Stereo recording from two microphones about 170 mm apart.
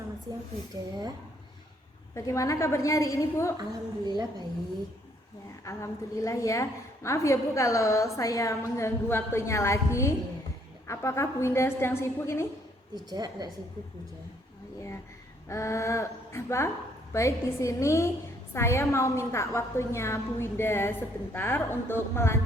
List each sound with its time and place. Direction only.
2.1 s a woman's voice: 20° left (ahead or behind)
3.6 s a woman's voice: 25° right (ahead or behind)
5.6 s a woman's voice: 20° left (ahead or behind)
13.1 s a woman's voice: 25° right (ahead or behind)
15.4 s a woman's voice: 15° left (ahead or behind)